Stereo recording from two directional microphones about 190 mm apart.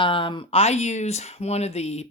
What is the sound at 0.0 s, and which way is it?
Speech, 25° left (ahead or behind).